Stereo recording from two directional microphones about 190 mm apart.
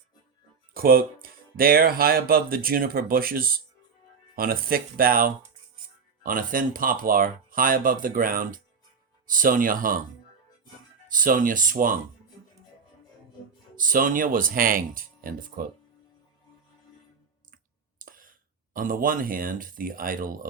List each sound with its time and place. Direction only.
0.7 s speech: 50° right (ahead or behind)
11.1 s speech: 45° right (ahead or behind)
13.7 s speech: 45° right (ahead or behind)
18.0 s speech: 45° right (ahead or behind)